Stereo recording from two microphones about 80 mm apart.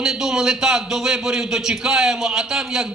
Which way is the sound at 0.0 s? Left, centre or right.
Centre.